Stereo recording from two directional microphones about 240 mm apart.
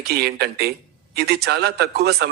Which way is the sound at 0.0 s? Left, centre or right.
Right.